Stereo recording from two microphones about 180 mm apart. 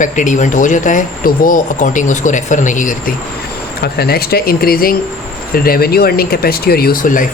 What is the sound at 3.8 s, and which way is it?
Speech, 60° left (ahead or behind).